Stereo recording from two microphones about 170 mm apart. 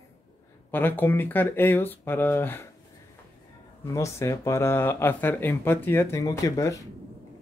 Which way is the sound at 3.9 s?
15° left (ahead or behind).